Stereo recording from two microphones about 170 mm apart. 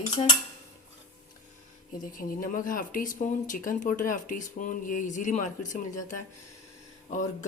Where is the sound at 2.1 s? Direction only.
55° left (ahead or behind).